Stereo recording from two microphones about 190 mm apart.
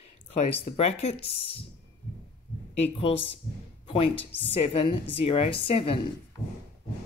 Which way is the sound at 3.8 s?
30° left (ahead or behind).